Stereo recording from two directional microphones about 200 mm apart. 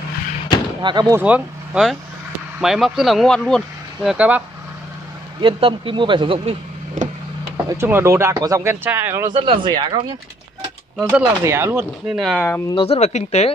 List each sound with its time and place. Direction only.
0.8 s speech: 20° right (ahead or behind)
1.2 s speech: 5° right (ahead or behind)
5.4 s speech: 25° right (ahead or behind)
7.7 s speech: 15° right (ahead or behind)
9.3 s speech: 25° right (ahead or behind)
11.1 s speech: 10° right (ahead or behind)
12.4 s speech: 10° left (ahead or behind)
12.7 s speech: 30° left (ahead or behind)